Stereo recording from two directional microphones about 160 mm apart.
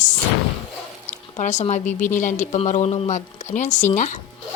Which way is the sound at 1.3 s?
45° left (ahead or behind).